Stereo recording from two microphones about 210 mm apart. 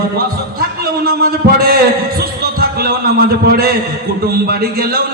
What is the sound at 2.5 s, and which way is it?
A man's voice, 45° right (ahead or behind).